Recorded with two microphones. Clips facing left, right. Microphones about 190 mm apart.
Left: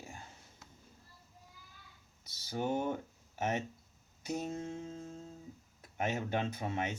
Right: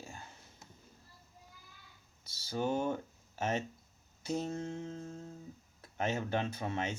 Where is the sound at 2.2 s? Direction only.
20° left (ahead or behind).